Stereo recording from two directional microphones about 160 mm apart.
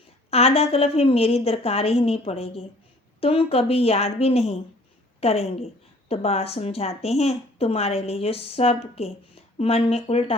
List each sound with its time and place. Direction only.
0.3 s speech: 40° left (ahead or behind)